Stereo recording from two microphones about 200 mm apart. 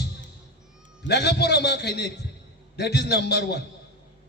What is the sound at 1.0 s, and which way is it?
A man's voice, 55° left (ahead or behind).